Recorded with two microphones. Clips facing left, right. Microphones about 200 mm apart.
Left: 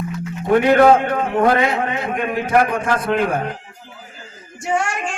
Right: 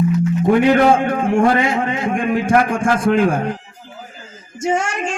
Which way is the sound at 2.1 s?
50° right (ahead or behind).